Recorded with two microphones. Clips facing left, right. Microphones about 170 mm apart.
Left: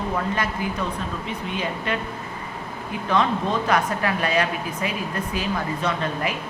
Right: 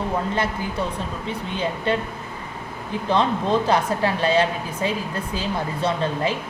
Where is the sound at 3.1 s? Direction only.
30° right (ahead or behind).